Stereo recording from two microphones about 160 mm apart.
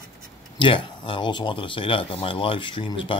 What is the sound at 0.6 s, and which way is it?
Speech, 30° left (ahead or behind).